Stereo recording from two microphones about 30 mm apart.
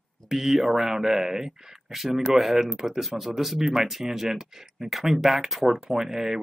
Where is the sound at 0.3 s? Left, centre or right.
Centre.